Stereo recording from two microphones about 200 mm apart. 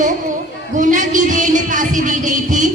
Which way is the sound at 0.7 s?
40° right (ahead or behind).